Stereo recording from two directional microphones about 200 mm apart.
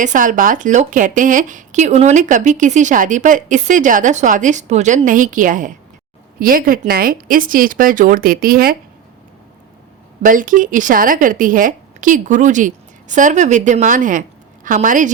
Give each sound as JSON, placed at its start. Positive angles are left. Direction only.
{"t": 0.0, "sound": "speech", "side_deg": -40}
{"t": 10.2, "sound": "speech", "side_deg": -40}